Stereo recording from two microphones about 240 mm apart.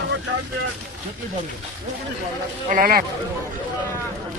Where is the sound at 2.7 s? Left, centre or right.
Right.